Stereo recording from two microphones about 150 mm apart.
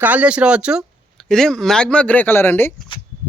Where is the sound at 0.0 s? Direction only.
10° right (ahead or behind).